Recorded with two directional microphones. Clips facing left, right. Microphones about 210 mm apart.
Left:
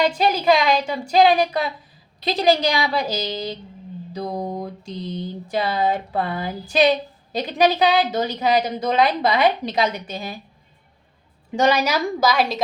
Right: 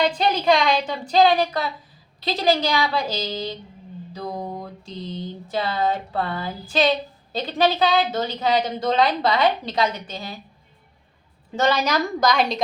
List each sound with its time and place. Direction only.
0.0 s a woman's voice: 10° left (ahead or behind)
11.5 s a woman's voice: 10° left (ahead or behind)